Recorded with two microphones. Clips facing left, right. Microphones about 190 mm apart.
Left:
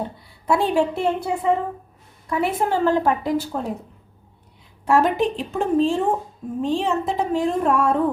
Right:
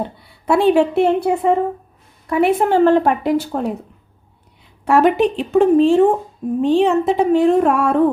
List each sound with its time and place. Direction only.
0.2 s a woman's voice: 70° right (ahead or behind)
4.9 s a woman's voice: 70° right (ahead or behind)